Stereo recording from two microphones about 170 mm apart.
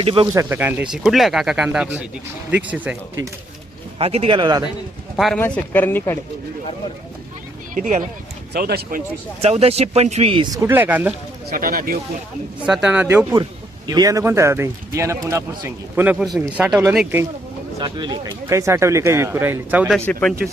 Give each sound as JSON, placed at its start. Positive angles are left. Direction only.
{"t": 0.0, "sound": "speech", "side_deg": -30}
{"t": 0.3, "sound": "speech", "side_deg": -10}
{"t": 3.9, "sound": "speech", "side_deg": -35}
{"t": 5.1, "sound": "speech", "side_deg": 0}
{"t": 7.8, "sound": "speech", "side_deg": -50}
{"t": 8.5, "sound": "speech", "side_deg": -65}
{"t": 9.4, "sound": "speech", "side_deg": -35}
{"t": 10.6, "sound": "speech", "side_deg": -10}
{"t": 11.5, "sound": "speech", "side_deg": -55}
{"t": 12.6, "sound": "speech", "side_deg": -5}
{"t": 13.3, "sound": "speech", "side_deg": -25}
{"t": 17.7, "sound": "speech", "side_deg": -25}
{"t": 18.4, "sound": "speech", "side_deg": -15}
{"t": 20.1, "sound": "speech", "side_deg": 10}